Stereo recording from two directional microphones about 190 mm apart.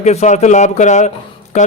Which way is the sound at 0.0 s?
35° left (ahead or behind).